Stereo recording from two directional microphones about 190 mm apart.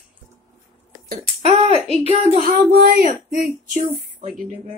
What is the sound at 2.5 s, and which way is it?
Speech, 50° right (ahead or behind).